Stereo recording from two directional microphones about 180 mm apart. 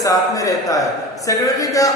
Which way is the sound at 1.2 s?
20° left (ahead or behind).